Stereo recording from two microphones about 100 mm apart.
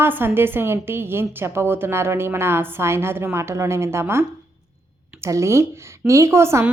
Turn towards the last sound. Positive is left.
turn(degrees=-25)  # may be behind; listen again after turning